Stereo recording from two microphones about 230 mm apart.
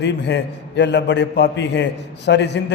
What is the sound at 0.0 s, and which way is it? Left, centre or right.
A man's voice, left.